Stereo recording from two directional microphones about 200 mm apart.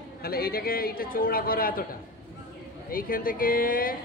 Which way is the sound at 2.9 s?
45° left (ahead or behind).